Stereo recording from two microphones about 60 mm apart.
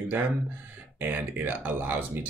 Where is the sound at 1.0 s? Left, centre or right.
Right.